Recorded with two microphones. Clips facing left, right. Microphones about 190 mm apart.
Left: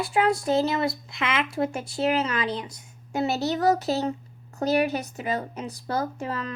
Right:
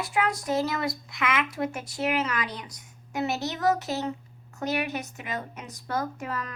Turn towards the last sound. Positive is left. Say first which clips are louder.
# left 3 dB
turn(degrees=30)  # may be behind; listen again after turning